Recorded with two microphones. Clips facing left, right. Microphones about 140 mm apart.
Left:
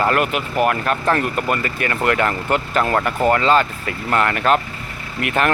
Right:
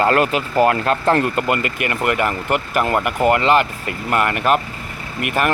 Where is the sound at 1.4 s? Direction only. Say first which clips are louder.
Right 1 dB; 20° right (ahead or behind).